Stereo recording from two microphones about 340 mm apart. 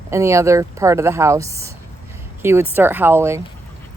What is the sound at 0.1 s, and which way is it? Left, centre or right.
Speech, centre.